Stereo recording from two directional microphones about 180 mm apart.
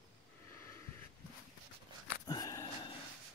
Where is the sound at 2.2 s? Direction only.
20° left (ahead or behind).